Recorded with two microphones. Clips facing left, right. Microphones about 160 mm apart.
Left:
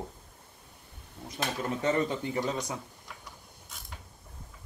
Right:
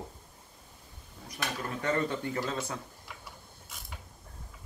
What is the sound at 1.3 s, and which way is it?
Speech, 20° left (ahead or behind).